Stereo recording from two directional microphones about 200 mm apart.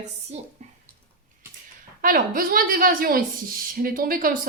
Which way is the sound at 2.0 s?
45° right (ahead or behind).